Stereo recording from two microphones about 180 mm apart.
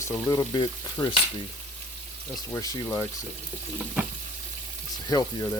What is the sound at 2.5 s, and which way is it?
Speech, 20° left (ahead or behind).